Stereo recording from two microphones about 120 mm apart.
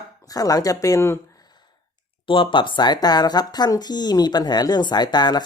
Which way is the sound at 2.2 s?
45° left (ahead or behind).